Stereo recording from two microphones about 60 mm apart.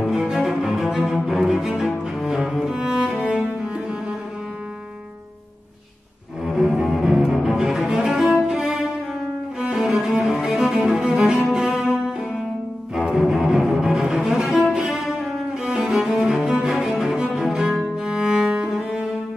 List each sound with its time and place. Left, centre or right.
0.0 s cello: centre
6.4 s cello: centre
9.6 s cello: centre
12.9 s music: centre
13.9 s cello: centre